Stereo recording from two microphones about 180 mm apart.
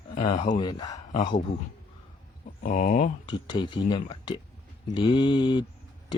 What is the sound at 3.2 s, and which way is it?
Speech, 25° left (ahead or behind).